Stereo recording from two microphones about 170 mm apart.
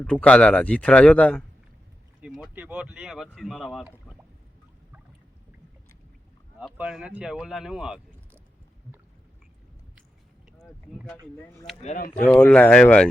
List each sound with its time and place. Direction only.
0.0 s speech: 5° left (ahead or behind)
2.2 s speech: 5° right (ahead or behind)
6.7 s speech: 5° right (ahead or behind)
11.8 s speech: 45° left (ahead or behind)
12.3 s speech: 5° left (ahead or behind)